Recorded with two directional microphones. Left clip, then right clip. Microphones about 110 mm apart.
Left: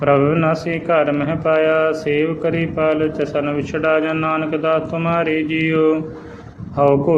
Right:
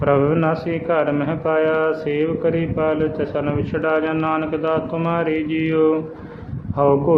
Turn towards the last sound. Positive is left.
turn(degrees=25)  # may be behind; listen again after turning